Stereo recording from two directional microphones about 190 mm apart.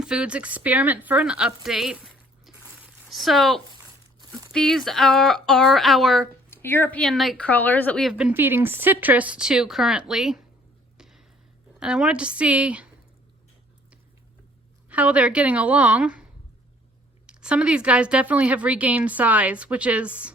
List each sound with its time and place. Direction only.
0.0 s a woman's voice: 5° right (ahead or behind)
2.5 s a sound: centre (ahead or behind)
3.1 s speech: centre (ahead or behind)
4.2 s crumpling: 20° right (ahead or behind)
4.5 s speech: centre (ahead or behind)
6.5 s speech: 10° left (ahead or behind)
8.3 s a woman's voice: 10° right (ahead or behind)
10.9 s a sound: centre (ahead or behind)
11.8 s speech: 5° right (ahead or behind)
14.8 s a woman's voice: 5° right (ahead or behind)
17.2 s a woman's voice: 5° right (ahead or behind)